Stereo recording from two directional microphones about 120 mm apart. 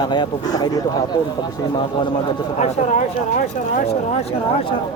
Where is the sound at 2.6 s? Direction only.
70° left (ahead or behind).